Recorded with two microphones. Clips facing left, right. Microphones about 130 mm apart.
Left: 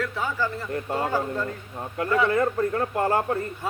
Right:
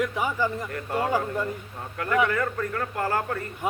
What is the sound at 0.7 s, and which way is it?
Speech, 25° left (ahead or behind).